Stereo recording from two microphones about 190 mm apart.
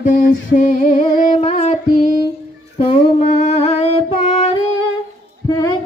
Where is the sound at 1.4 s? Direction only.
35° left (ahead or behind).